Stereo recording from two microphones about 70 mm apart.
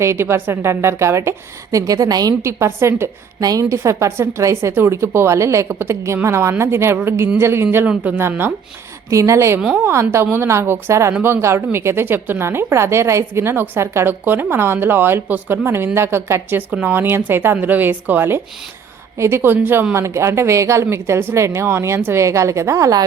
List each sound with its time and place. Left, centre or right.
0.0 s a woman's voice: right
1.8 s a woman's voice: right
2.4 s a woman's voice: right
3.4 s a woman's voice: right
9.0 s a woman's voice: right
14.1 s a woman's voice: right
19.1 s a woman's voice: right